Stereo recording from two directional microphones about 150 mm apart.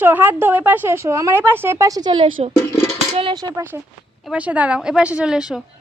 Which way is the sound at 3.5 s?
15° right (ahead or behind).